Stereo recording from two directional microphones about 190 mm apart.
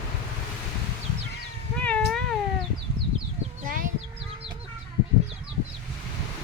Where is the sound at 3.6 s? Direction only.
45° right (ahead or behind).